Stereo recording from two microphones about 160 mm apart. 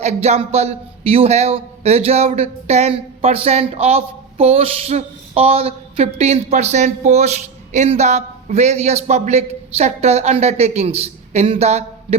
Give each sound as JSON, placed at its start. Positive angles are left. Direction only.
{"t": 0.0, "sound": "speech", "side_deg": -45}